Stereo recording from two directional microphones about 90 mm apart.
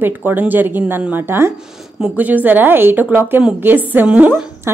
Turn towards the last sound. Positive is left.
turn(degrees=-15)  # may be behind; listen again after turning